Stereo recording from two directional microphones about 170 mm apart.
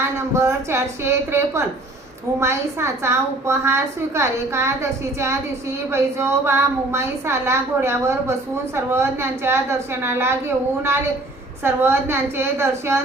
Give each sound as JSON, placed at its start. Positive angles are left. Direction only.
{"t": 0.3, "sound": "a woman's voice", "side_deg": -15}
{"t": 11.6, "sound": "a woman's voice", "side_deg": -15}